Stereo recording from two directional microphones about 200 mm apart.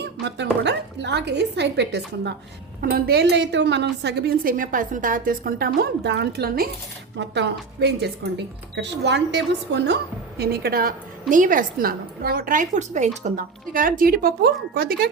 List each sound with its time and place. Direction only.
0.0 s a woman's voice: 60° right (ahead or behind)